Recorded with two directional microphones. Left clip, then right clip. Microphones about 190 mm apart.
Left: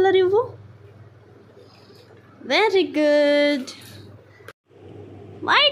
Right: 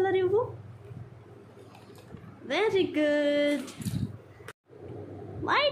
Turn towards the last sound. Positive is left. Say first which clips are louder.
# left 8 dB
turn(degrees=15)  # may be behind; listen again after turning